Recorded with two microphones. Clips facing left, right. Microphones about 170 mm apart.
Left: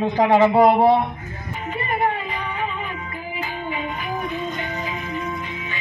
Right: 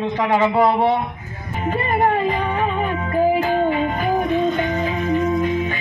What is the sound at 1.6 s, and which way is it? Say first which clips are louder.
Music: right 4 dB; 40° right (ahead or behind).